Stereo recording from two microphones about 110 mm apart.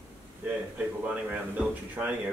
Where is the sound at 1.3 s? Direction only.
15° right (ahead or behind).